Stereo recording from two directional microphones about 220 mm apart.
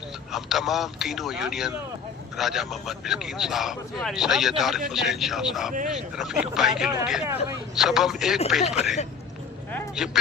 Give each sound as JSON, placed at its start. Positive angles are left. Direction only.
{"t": 0.3, "sound": "a man's voice", "side_deg": 0}
{"t": 8.6, "sound": "speech", "side_deg": 30}
{"t": 10.0, "sound": "a man's voice", "side_deg": -5}